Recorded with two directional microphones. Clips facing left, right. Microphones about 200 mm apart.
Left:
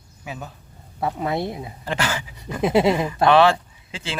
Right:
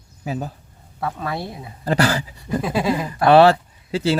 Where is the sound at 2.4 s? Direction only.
20° left (ahead or behind).